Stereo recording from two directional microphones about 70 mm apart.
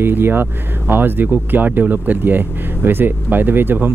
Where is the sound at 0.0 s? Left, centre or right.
Right.